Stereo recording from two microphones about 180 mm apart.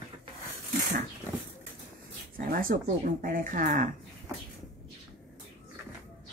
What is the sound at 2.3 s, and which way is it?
A woman's voice, 50° right (ahead or behind).